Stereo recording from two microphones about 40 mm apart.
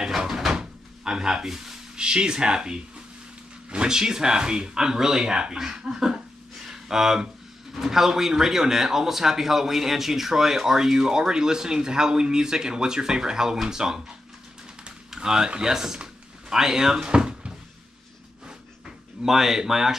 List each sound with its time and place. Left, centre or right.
0.3 s door: centre
0.6 s a man's voice: centre
6.7 s a sound: centre
7.7 s a man's voice: centre
19.2 s a man's voice: centre